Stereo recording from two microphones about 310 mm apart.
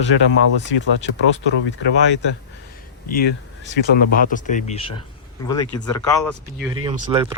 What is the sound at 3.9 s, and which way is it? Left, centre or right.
Speech, left.